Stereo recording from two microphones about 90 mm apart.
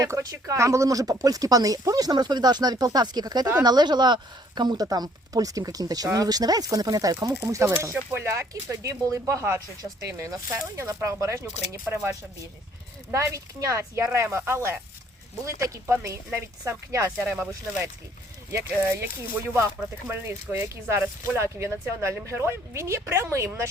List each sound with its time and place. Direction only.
0.0 s speech: 40° right (ahead or behind)
7.4 s speech: 30° right (ahead or behind)
13.1 s speech: 35° right (ahead or behind)
18.5 s speech: 30° right (ahead or behind)